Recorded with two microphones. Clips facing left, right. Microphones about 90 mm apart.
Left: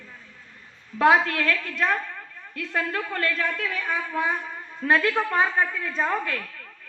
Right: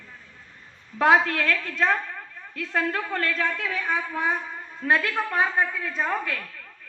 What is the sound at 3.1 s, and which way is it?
Speech, 25° right (ahead or behind).